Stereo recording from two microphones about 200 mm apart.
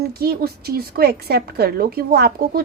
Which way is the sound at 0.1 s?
50° right (ahead or behind).